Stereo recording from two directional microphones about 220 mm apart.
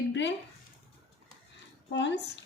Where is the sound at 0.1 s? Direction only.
55° left (ahead or behind).